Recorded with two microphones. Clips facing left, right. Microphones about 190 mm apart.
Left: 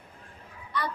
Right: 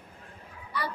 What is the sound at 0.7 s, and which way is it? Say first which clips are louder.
Children playing: left 2 dB; 10° right (ahead or behind).